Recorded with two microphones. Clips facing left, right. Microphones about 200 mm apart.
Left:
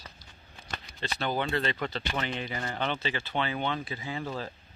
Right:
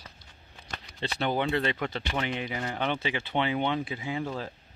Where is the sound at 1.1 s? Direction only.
15° right (ahead or behind).